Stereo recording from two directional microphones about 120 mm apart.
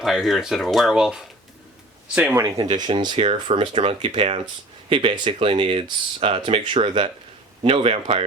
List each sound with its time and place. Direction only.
0.0 s speech: centre (ahead or behind)
2.3 s speech: 30° right (ahead or behind); by 8.2 s 50° right (ahead or behind)